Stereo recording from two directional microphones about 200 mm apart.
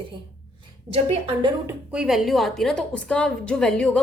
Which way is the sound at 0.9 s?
30° right (ahead or behind).